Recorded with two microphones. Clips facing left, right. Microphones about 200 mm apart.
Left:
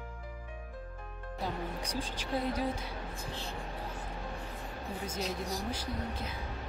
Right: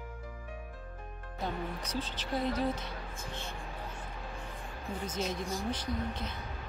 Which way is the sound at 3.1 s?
35° left (ahead or behind).